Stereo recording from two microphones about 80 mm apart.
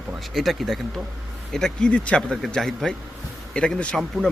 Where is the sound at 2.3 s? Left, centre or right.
Centre.